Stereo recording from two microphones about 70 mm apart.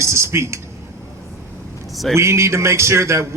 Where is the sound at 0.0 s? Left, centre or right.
Right.